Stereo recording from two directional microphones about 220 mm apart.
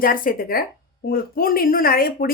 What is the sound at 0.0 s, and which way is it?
Speech, 40° left (ahead or behind).